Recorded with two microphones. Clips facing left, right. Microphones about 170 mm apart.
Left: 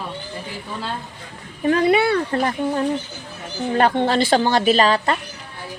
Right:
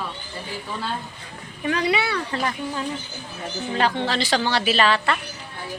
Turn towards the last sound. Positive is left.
turn(degrees=40)  # may be behind; listen again after turning